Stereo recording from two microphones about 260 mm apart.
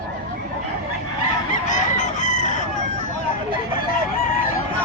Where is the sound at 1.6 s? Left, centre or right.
Left.